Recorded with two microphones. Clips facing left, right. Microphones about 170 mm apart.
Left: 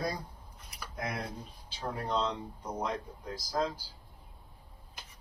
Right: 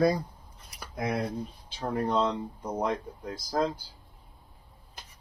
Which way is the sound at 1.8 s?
55° right (ahead or behind).